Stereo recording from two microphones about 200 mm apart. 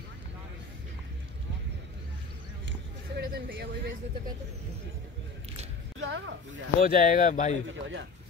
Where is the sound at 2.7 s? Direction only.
60° right (ahead or behind).